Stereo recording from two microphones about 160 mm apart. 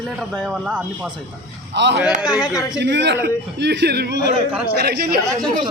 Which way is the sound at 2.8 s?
90° right.